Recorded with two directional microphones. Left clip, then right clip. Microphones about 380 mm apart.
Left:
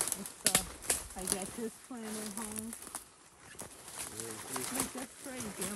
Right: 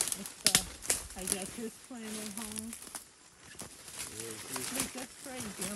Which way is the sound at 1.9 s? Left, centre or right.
Centre.